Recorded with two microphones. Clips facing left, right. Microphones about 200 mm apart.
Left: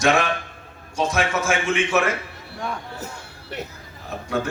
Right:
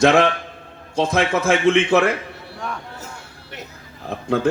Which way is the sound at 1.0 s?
60° right (ahead or behind).